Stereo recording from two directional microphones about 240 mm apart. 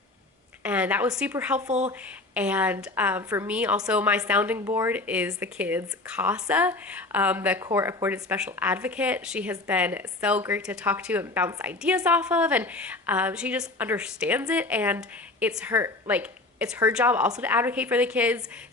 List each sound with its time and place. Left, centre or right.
0.6 s a woman's voice: centre
1.6 s speech: right
1.9 s a woman's voice: centre